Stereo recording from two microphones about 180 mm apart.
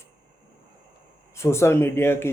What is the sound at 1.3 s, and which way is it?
Speech, 15° left (ahead or behind).